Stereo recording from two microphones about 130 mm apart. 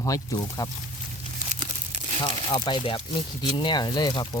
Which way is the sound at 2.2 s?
40° left (ahead or behind).